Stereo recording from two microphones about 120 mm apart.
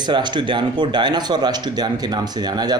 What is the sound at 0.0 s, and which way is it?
Speech, 40° right (ahead or behind).